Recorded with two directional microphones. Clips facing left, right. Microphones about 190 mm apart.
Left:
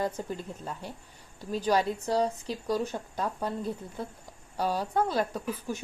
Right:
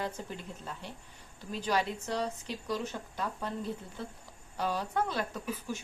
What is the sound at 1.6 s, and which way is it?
A woman's voice, 40° left (ahead or behind).